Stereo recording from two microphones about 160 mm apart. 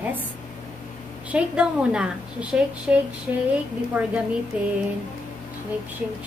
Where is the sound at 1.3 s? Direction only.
5° right (ahead or behind).